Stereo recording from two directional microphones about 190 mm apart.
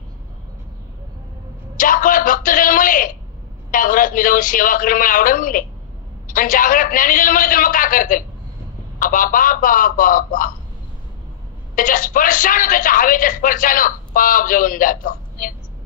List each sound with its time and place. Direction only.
1.8 s a sound: 45° left (ahead or behind)
3.7 s a woman's voice: 45° left (ahead or behind)
11.7 s a woman's voice: 45° left (ahead or behind)